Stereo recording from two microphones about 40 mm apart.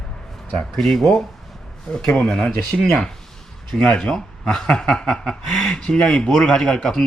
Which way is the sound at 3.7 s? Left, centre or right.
Centre.